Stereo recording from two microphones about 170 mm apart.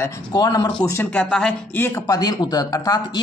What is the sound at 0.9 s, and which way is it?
Speech, 10° left (ahead or behind).